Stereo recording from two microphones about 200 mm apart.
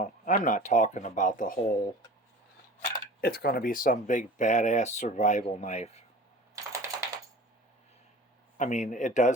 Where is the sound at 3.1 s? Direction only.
50° left (ahead or behind); by 6.0 s 35° left (ahead or behind).